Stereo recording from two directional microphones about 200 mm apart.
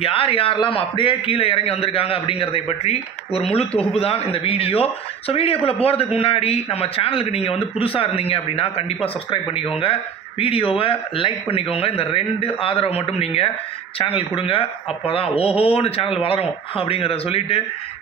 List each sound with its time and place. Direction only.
0.0 s a man's voice: 30° left (ahead or behind)